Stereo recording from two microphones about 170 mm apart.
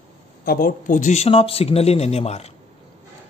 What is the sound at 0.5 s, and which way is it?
Speech, 55° left (ahead or behind).